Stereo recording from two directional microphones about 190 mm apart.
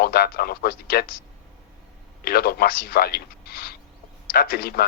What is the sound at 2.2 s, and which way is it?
A man's voice, 55° left (ahead or behind).